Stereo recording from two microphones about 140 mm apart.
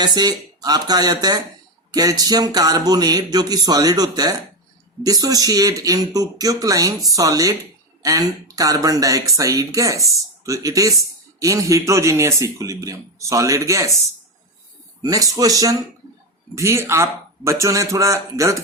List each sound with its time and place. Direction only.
0.0 s speech: 30° right (ahead or behind)
15.0 s speech: 25° right (ahead or behind)